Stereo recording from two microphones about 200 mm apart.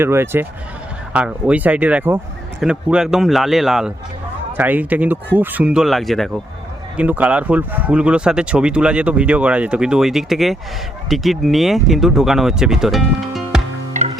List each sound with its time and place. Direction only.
0.0 s speech: 10° right (ahead or behind)
14.0 s music: 35° right (ahead or behind)